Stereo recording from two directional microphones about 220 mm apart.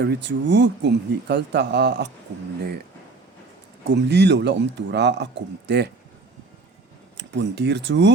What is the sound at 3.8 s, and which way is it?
Speech, 50° right (ahead or behind).